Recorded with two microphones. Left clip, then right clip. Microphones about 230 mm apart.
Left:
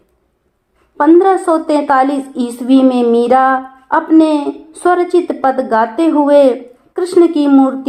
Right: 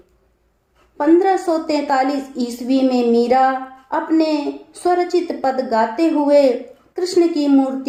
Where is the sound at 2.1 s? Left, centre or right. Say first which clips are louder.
Left 4 dB; left.